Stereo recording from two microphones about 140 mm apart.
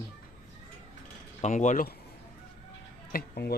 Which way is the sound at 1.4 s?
60° left (ahead or behind).